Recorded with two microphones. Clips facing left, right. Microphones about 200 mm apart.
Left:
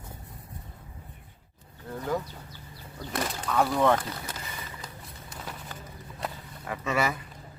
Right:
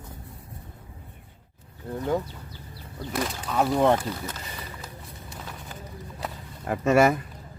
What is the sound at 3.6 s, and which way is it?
Speech, 20° right (ahead or behind).